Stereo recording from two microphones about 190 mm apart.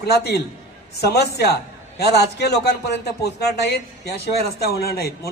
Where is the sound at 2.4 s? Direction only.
55° left (ahead or behind).